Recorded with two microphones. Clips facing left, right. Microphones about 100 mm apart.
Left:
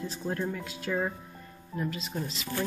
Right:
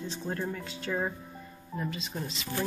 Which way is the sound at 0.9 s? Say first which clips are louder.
Left 1 dB; 5° right (ahead or behind).